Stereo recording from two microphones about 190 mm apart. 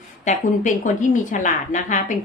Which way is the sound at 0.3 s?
40° left (ahead or behind).